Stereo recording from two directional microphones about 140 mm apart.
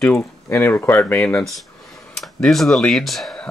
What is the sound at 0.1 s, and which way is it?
Speech, 15° left (ahead or behind).